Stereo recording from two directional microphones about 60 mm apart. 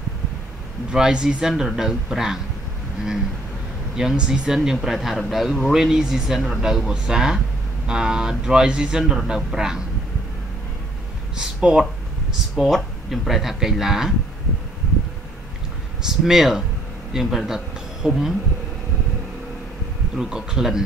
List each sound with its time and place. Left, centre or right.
0.9 s a man's voice: centre
3.9 s a man's voice: centre
11.3 s speech: centre
12.5 s speech: centre
16.1 s a man's voice: centre
18.0 s speech: right
20.2 s a man's voice: centre